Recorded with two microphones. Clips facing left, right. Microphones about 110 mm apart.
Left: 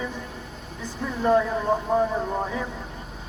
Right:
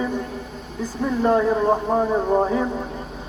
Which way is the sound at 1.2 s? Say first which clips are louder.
Right 3 dB; 30° right (ahead or behind).